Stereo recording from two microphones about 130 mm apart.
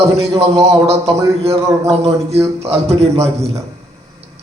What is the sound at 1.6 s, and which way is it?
Speech, 25° right (ahead or behind).